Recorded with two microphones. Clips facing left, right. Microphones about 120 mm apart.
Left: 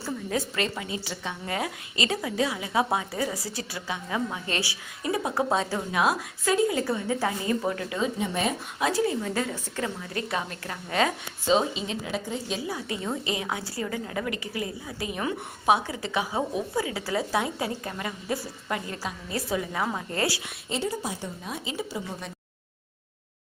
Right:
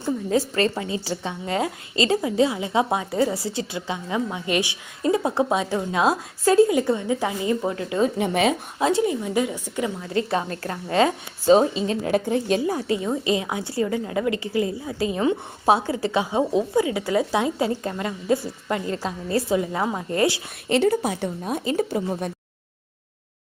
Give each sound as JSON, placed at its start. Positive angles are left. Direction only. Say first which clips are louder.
{"t": 0.3, "sound": "a woman's voice", "louder": "right 7 dB", "side_deg": -35}
{"t": 5.5, "sound": "a woman's voice", "louder": "right 3 dB", "side_deg": -15}
{"t": 5.9, "sound": "a woman's voice", "louder": "right 4 dB", "side_deg": -25}
{"t": 6.4, "sound": "a woman's voice", "louder": "right 8 dB", "side_deg": -35}
{"t": 6.7, "sound": "a woman's voice", "louder": "right 5 dB", "side_deg": -20}
{"t": 8.2, "sound": "speech", "louder": "right 7 dB", "side_deg": -80}
{"t": 8.8, "sound": "a woman's voice", "louder": "right 4 dB", "side_deg": -25}
{"t": 10.2, "sound": "a woman's voice", "louder": "right 6 dB", "side_deg": -35}
{"t": 11.4, "sound": "a woman's voice", "louder": "right 7 dB", "side_deg": -40}
{"t": 12.0, "sound": "a woman's voice", "louder": "right 10 dB", "side_deg": -55}
{"t": 13.0, "sound": "a woman's voice", "louder": "right 7 dB", "side_deg": -20}
{"t": 20.7, "sound": "a woman's voice", "louder": "right 10 dB", "side_deg": -65}
{"t": 21.4, "sound": "a woman's voice", "louder": "right 11 dB", "side_deg": -45}